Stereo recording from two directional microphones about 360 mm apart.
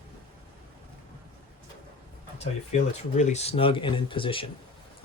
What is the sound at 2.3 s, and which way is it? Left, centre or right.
Speech, centre.